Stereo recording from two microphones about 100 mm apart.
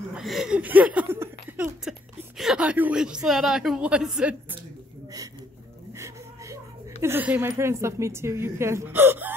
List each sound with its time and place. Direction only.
0.1 s speech: 5° right (ahead or behind)
0.6 s a sound: 15° right (ahead or behind)
1.0 s speech: 25° right (ahead or behind)
1.6 s a woman's voice: 5° right (ahead or behind)
5.9 s a sound: 30° right (ahead or behind)
7.3 s speech: 25° right (ahead or behind)